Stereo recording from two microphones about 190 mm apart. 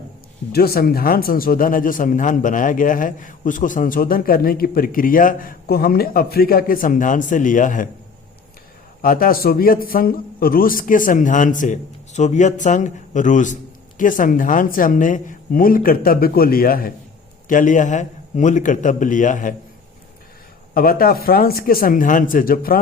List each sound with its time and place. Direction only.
0.5 s speech: 55° left (ahead or behind)
9.0 s speech: 50° left (ahead or behind)
20.7 s speech: 50° left (ahead or behind)